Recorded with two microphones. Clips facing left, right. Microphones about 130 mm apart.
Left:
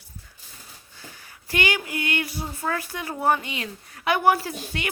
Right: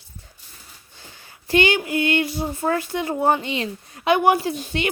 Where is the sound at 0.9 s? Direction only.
25° right (ahead or behind).